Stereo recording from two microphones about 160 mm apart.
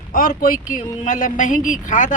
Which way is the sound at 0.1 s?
60° left (ahead or behind).